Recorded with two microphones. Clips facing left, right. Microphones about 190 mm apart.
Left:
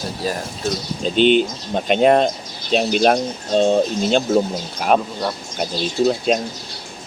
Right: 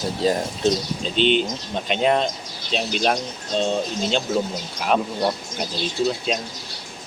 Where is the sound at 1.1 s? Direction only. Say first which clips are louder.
Left 5 dB; 50° left (ahead or behind).